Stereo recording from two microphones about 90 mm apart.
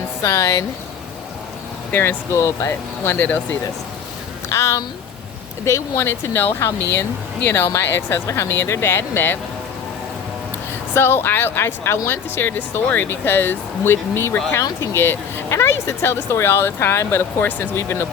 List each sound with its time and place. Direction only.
0.2 s speech: 40° left (ahead or behind)
1.9 s speech: 25° left (ahead or behind)
3.2 s speech: 20° left (ahead or behind)
4.4 s speech: 30° left (ahead or behind)
10.9 s speech: 25° left (ahead or behind)